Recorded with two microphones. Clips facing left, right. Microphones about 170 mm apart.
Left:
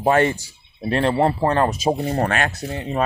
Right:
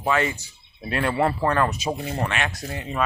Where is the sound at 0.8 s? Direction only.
30° left (ahead or behind).